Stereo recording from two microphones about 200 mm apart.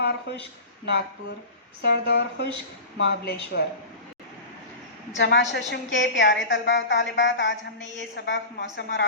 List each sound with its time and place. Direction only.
0.0 s speech: 55° left (ahead or behind)
1.8 s a woman's voice: 55° left (ahead or behind)
5.1 s a woman's voice: 60° left (ahead or behind)